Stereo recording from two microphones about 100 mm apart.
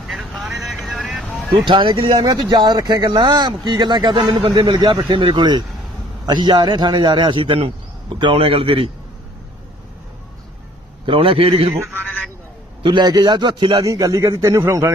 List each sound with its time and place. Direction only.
0.1 s vehicle: centre (ahead or behind)
1.6 s a man's voice: 55° right (ahead or behind)
11.0 s a man's voice: 65° right (ahead or behind)
12.8 s speech: 50° right (ahead or behind)
13.8 s a man's voice: 35° right (ahead or behind)